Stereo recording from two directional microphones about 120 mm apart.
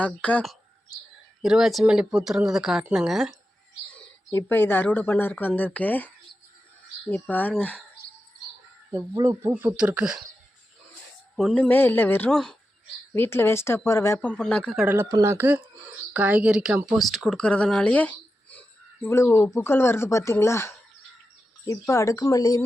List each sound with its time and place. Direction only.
0.0 s speech: 10° left (ahead or behind)
1.4 s speech: 5° right (ahead or behind)
4.4 s speech: 15° left (ahead or behind)
7.1 s speech: 15° left (ahead or behind)
8.9 s speech: 30° right (ahead or behind); by 10.2 s 5° right (ahead or behind)
11.3 s speech: 5° left (ahead or behind)
11.7 s speech: 15° left (ahead or behind)
12.3 s speech: 5° left (ahead or behind)
13.1 s speech: 20° left (ahead or behind)
14.3 s speech: 10° left (ahead or behind)
15.1 s speech: 25° right (ahead or behind); by 22.6 s 30° left (ahead or behind)